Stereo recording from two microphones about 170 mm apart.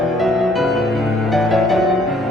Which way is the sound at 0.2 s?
Centre (ahead or behind).